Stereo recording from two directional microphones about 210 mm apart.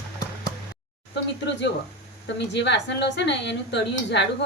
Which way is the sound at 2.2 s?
55° left (ahead or behind).